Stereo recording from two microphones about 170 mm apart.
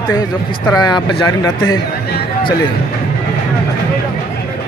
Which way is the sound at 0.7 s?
25° left (ahead or behind).